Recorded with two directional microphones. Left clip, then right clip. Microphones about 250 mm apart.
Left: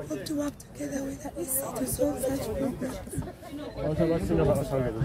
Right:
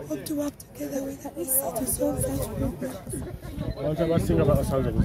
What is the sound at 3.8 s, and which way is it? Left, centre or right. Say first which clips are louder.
Speech: right 2 dB; right.